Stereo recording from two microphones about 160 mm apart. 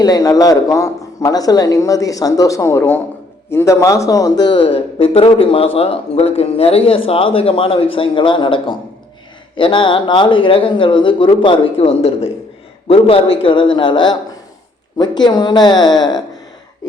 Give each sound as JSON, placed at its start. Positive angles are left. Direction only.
{"t": 0.0, "sound": "a man's voice", "side_deg": 25}